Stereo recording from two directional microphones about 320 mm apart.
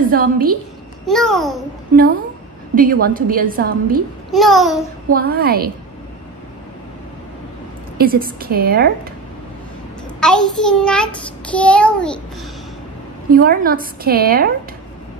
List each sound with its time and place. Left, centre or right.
0.1 s a woman's voice: right
1.0 s child singing: centre
2.7 s a woman's voice: right
4.3 s child singing: centre
5.1 s a woman's voice: right
8.0 s a woman's voice: right
10.2 s child singing: centre
13.3 s a woman's voice: right